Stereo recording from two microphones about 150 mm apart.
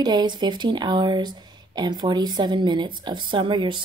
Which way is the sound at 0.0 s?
30° right (ahead or behind).